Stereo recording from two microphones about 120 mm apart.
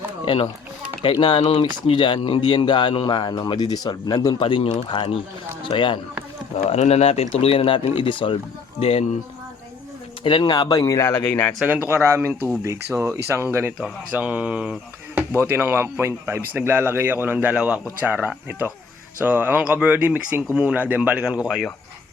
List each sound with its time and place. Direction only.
1.1 s speech: 40° left (ahead or behind)
1.4 s speech: 50° left (ahead or behind)
6.6 s speech: 70° left (ahead or behind); by 8.4 s 45° left (ahead or behind)
8.8 s speech: 60° left (ahead or behind)
10.2 s speech: 40° left (ahead or behind); by 11.5 s 15° left (ahead or behind)
11.6 s speech: 15° right (ahead or behind)